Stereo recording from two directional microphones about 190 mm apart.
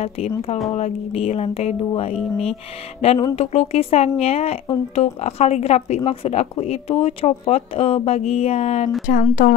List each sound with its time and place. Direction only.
0.0 s speech: 35° left (ahead or behind)